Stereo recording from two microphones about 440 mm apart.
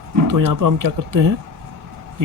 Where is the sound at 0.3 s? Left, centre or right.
Right.